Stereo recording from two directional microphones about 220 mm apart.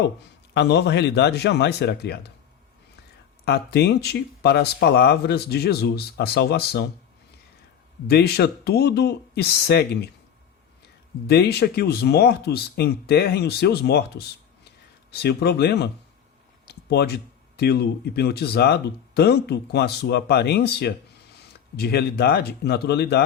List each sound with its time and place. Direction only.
0.5 s speech: 50° left (ahead or behind)
3.4 s speech: 45° left (ahead or behind)
8.0 s speech: 45° left (ahead or behind)
11.3 s speech: 45° left (ahead or behind)
16.6 s a sound: 45° left (ahead or behind)
17.6 s speech: 45° left (ahead or behind)